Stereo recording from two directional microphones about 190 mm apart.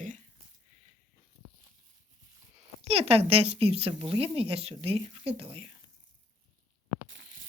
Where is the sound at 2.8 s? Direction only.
30° right (ahead or behind).